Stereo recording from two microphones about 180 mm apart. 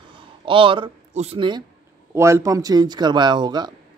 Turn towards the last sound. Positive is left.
turn(degrees=-25)  # may be behind; listen again after turning